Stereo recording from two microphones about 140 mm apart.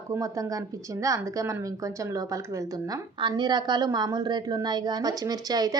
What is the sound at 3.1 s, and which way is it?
A woman's voice, 35° right (ahead or behind).